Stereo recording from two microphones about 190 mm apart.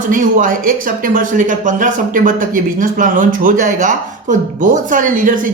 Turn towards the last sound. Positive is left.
turn(degrees=-45)  # may be behind; listen again after turning